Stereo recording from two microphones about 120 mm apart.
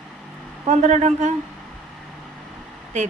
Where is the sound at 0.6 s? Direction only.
75° right (ahead or behind).